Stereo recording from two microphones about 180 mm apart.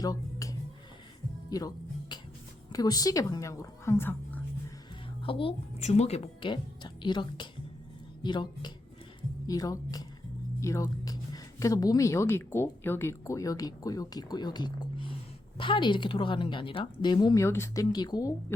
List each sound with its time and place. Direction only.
0.0 s a sound: 20° left (ahead or behind)
1.5 s music: 20° left (ahead or behind)
2.7 s speech: 20° left (ahead or behind)
5.2 s speech: 30° left (ahead or behind)
10.6 s music: 15° left (ahead or behind)
11.6 s speech: 20° left (ahead or behind)